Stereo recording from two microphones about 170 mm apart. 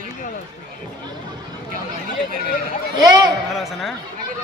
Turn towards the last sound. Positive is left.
turn(degrees=0)  # may be behind; listen again after turning